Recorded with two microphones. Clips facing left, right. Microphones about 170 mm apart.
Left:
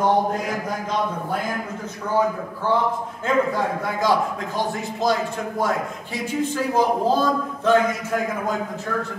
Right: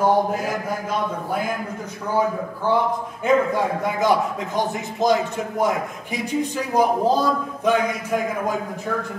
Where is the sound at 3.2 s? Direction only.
20° right (ahead or behind).